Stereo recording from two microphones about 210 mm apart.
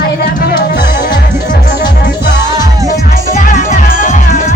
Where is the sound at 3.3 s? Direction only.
40° left (ahead or behind).